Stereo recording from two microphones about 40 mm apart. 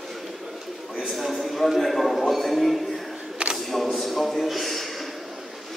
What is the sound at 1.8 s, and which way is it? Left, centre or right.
A man's voice, centre.